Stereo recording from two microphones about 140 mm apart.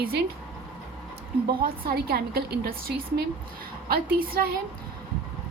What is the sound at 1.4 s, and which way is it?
A woman's voice, 90° right.